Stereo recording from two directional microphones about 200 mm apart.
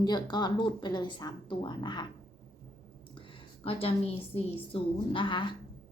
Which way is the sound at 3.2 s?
25° left (ahead or behind).